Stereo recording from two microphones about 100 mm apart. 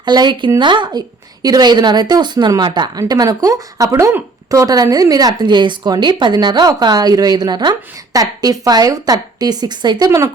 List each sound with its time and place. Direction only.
0.0 s a woman's voice: 45° right (ahead or behind)